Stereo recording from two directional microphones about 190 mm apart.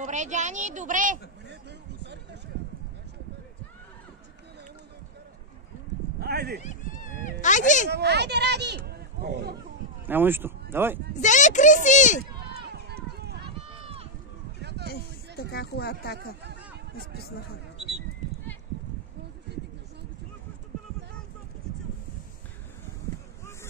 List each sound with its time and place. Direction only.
0.0 s a woman's voice: 40° right (ahead or behind)
6.1 s a sound: 55° right (ahead or behind)
6.6 s cat: 40° left (ahead or behind)
7.9 s speech: 60° right (ahead or behind)
10.0 s speech: 10° right (ahead or behind)
11.1 s a child's voice: 40° left (ahead or behind)
12.4 s run: 60° right (ahead or behind)
13.7 s run: 30° right (ahead or behind)
14.6 s a sound: 60° right (ahead or behind)
15.5 s speech: 55° left (ahead or behind)
18.2 s horse: 40° right (ahead or behind)